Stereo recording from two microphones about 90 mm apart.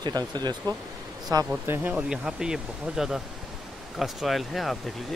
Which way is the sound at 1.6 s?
25° right (ahead or behind).